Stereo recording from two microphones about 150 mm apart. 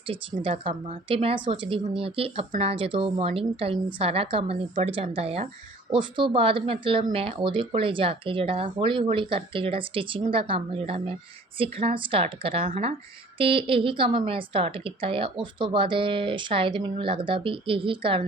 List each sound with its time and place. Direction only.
0.1 s speech: 40° right (ahead or behind)